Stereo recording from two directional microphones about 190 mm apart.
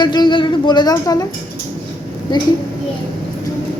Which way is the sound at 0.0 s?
25° left (ahead or behind).